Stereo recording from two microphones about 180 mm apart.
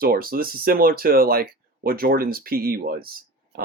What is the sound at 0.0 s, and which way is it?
Speech, 55° right (ahead or behind).